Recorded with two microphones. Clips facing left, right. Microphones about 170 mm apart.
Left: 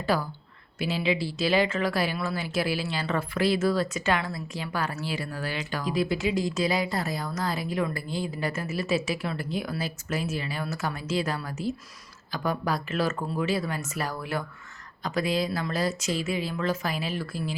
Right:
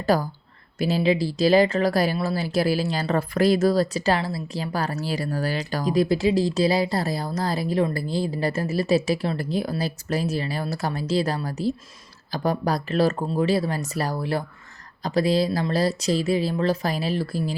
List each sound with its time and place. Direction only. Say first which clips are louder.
0.0 s speech: right 5 dB; 40° right (ahead or behind)